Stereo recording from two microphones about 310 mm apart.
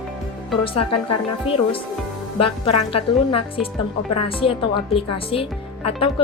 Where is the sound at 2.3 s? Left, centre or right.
Left.